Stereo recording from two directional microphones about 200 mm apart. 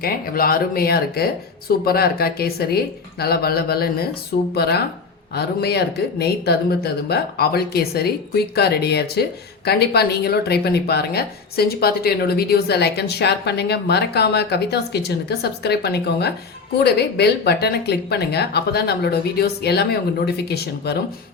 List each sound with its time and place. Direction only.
0.0 s speech: 50° left (ahead or behind)